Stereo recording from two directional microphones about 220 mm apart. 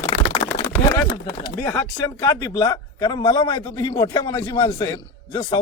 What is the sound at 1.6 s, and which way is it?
A man's voice, 10° left (ahead or behind).